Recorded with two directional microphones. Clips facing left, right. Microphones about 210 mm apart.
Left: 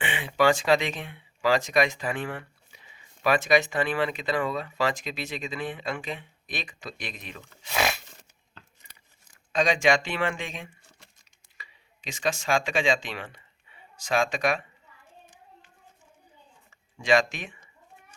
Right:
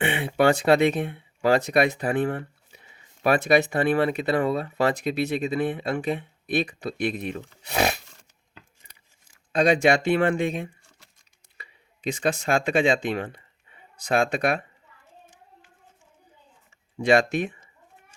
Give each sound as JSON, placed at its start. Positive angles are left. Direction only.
{"t": 0.0, "sound": "speech", "side_deg": -55}
{"t": 7.3, "sound": "speech", "side_deg": -40}
{"t": 10.2, "sound": "speech", "side_deg": -40}
{"t": 12.0, "sound": "speech", "side_deg": -55}
{"t": 17.0, "sound": "speech", "side_deg": -55}